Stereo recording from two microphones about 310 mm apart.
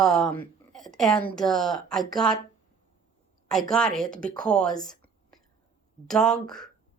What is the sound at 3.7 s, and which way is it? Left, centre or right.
A woman's voice, centre.